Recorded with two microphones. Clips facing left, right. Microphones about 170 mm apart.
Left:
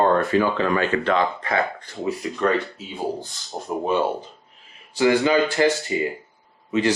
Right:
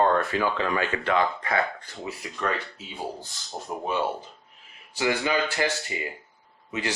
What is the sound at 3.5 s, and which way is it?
Speech, 45° left (ahead or behind).